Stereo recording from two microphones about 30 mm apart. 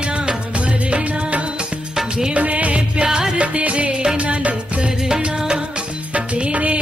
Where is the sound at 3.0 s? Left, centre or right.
Centre.